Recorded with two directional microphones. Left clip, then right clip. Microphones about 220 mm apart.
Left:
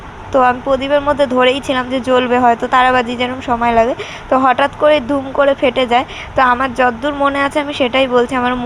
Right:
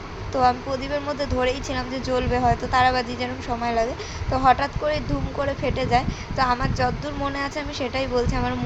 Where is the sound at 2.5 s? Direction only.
40° left (ahead or behind).